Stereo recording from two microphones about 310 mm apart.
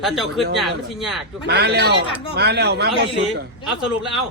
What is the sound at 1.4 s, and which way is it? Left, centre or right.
A man's voice, right.